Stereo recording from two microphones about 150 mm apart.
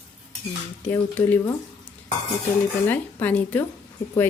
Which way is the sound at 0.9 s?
15° left (ahead or behind).